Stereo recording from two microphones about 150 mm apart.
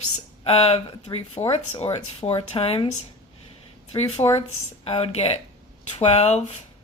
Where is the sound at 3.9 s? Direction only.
45° left (ahead or behind).